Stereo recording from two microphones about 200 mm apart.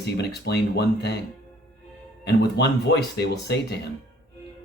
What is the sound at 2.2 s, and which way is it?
Speech, 55° left (ahead or behind).